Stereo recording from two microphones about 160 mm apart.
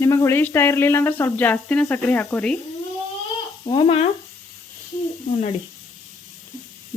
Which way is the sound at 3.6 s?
35° left (ahead or behind).